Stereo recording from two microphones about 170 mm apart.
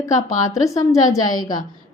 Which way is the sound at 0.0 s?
20° left (ahead or behind).